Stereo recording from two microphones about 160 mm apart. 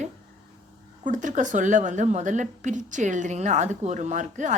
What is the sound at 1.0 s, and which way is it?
A woman's voice, 50° right (ahead or behind).